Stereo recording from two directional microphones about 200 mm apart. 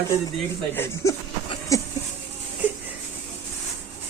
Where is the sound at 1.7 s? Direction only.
15° left (ahead or behind).